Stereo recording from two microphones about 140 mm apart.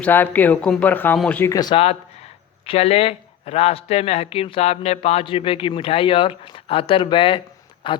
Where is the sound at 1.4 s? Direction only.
25° left (ahead or behind).